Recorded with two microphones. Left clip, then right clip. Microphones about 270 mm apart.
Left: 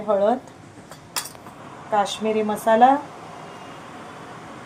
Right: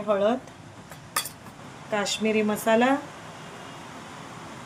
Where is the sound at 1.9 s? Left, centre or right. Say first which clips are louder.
Left 4 dB; centre.